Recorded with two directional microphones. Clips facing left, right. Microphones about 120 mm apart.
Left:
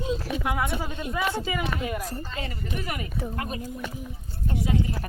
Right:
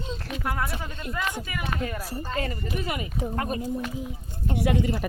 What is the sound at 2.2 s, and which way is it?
Speech, 45° right (ahead or behind).